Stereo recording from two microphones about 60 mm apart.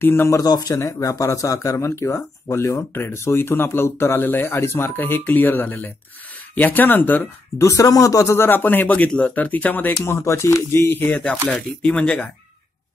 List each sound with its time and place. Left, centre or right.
0.0 s speech: left
0.3 s speech: left
0.8 s speech: left
7.5 s speech: left
8.5 s speech: left
10.0 s speech: left
11.1 s speech: left